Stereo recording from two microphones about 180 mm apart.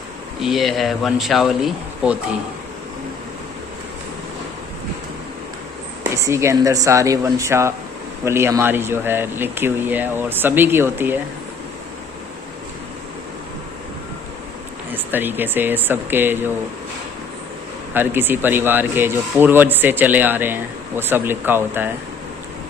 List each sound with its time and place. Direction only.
0.4 s speech: centre (ahead or behind)
6.2 s speech: 15° right (ahead or behind)
14.8 s speech: 10° right (ahead or behind)
17.9 s speech: 10° right (ahead or behind)